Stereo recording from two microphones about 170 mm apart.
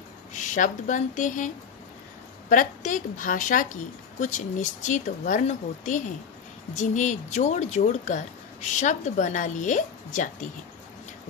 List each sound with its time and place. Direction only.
0.3 s speech: 50° left (ahead or behind)
2.5 s speech: 50° left (ahead or behind)